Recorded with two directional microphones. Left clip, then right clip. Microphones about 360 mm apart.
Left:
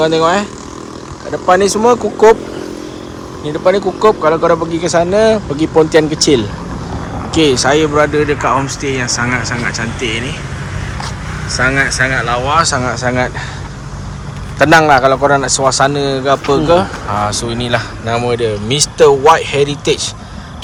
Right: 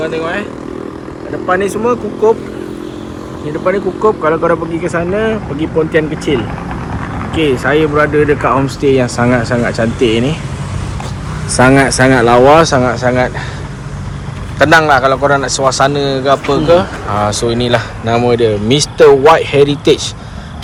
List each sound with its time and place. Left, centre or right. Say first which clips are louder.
0.0 s speech: left 6 dB; centre
1.5 s a man's voice: left 4 dB; centre
3.6 s a man's voice: left 2 dB; centre
7.4 s speech: even; centre
11.6 s speech: right 4 dB; right
12.5 s a man's voice: right 4 dB; centre
14.6 s a man's voice: even; centre